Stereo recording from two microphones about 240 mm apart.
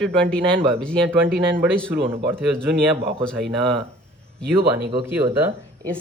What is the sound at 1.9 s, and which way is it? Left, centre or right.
Speech, centre.